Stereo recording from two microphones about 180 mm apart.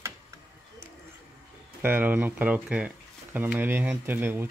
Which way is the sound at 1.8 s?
10° right (ahead or behind).